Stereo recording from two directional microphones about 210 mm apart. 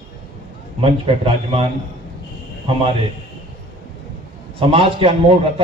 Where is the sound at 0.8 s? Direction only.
25° right (ahead or behind).